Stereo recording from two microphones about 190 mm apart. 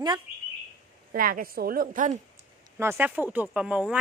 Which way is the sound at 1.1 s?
50° right (ahead or behind).